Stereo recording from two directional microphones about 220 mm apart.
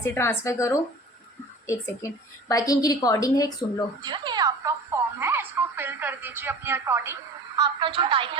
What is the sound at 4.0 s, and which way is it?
A woman's voice, 20° right (ahead or behind).